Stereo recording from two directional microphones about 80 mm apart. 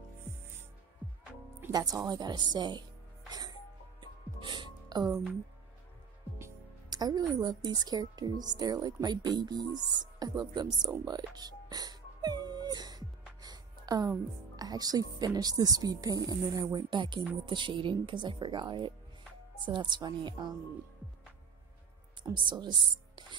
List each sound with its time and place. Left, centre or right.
1.7 s speech: right
3.3 s music: right
4.0 s music: right
6.9 s a woman's voice: right
11.1 s music: right
14.6 s speech: right
16.7 s a woman's voice: right
17.5 s a woman's voice: right
22.3 s a woman's voice: right